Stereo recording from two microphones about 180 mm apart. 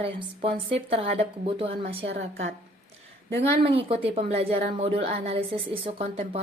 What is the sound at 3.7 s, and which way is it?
A woman's voice, 30° right (ahead or behind).